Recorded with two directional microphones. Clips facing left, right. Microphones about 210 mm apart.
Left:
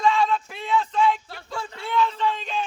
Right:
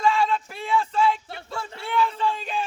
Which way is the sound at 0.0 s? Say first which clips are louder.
Left 1 dB; 5° right (ahead or behind).